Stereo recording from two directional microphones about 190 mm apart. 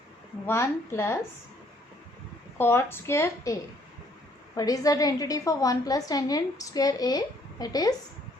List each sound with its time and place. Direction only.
0.4 s a woman's voice: 15° left (ahead or behind)
2.6 s a woman's voice: 10° left (ahead or behind)